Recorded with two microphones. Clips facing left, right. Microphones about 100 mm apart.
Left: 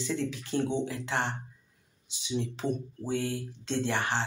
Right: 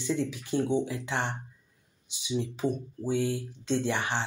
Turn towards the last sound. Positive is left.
turn(degrees=-15)  # may be behind; listen again after turning